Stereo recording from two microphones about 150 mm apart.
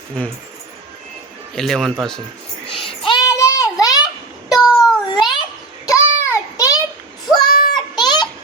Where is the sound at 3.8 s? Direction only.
25° left (ahead or behind).